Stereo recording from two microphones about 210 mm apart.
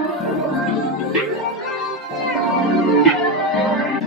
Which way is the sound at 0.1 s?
Centre (ahead or behind).